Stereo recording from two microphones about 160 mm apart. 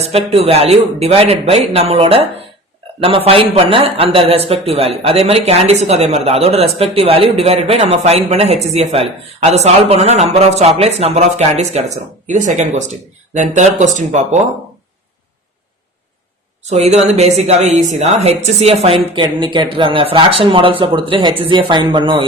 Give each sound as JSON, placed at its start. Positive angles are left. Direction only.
{"t": 0.0, "sound": "speech", "side_deg": -40}
{"t": 16.6, "sound": "a woman's voice", "side_deg": -45}